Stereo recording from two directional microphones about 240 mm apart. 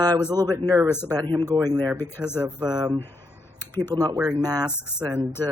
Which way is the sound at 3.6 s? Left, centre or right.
Centre.